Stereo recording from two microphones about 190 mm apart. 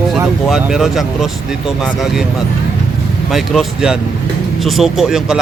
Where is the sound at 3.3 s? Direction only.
Centre (ahead or behind).